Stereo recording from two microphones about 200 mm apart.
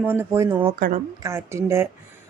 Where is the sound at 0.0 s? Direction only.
10° right (ahead or behind).